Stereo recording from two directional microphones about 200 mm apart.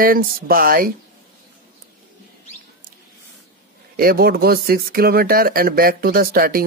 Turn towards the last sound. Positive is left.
turn(degrees=-45)  # may be behind; listen again after turning